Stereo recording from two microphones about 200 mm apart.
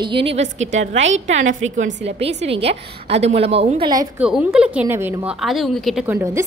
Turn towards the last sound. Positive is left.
turn(degrees=-10)  # may be behind; listen again after turning